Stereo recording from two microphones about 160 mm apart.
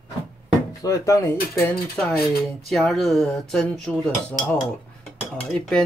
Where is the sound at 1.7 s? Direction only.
Centre (ahead or behind).